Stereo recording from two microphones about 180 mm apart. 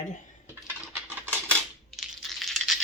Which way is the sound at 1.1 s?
10° right (ahead or behind).